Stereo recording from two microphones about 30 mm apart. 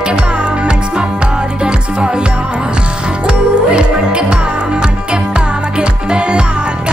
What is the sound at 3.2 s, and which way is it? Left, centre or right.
Music, right.